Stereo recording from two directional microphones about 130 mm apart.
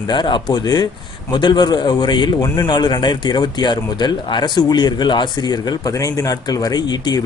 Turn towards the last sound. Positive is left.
turn(degrees=30)  # may be behind; listen again after turning